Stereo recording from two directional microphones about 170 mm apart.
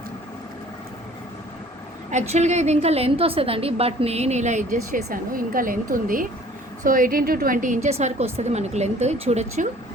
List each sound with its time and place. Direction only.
2.0 s a woman's voice: 45° right (ahead or behind)